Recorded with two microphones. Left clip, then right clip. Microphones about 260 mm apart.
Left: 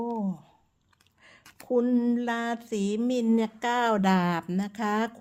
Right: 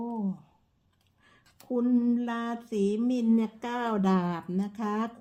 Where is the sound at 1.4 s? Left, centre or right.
Left.